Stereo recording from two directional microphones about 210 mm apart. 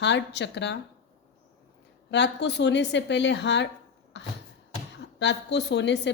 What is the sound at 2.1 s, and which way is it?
Speech, 55° left (ahead or behind).